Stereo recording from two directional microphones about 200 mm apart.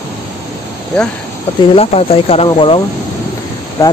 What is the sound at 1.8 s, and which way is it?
Speech, 30° left (ahead or behind).